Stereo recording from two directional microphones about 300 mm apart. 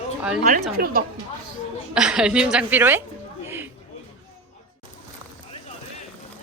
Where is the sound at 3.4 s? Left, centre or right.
Centre.